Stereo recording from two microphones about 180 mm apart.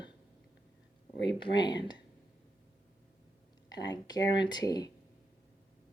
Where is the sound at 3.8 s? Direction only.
20° left (ahead or behind).